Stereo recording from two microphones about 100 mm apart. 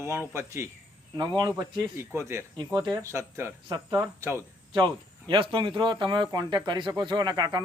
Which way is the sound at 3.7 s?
40° right (ahead or behind).